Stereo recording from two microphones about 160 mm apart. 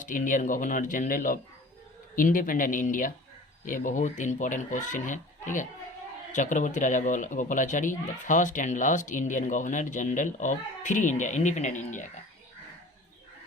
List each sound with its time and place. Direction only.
0.0 s speech: 55° left (ahead or behind)